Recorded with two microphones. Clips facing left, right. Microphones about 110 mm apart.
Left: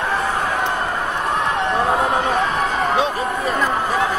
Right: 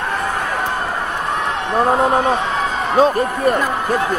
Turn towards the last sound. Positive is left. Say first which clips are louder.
# right 7 dB
turn(degrees=-40)  # may be behind; listen again after turning